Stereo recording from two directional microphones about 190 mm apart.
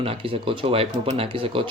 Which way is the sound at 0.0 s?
30° right (ahead or behind).